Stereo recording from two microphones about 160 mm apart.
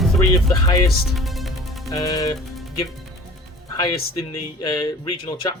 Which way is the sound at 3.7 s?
25° left (ahead or behind).